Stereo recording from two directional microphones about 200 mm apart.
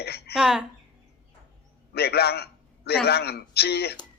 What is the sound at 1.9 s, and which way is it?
A man's voice, 55° left (ahead or behind).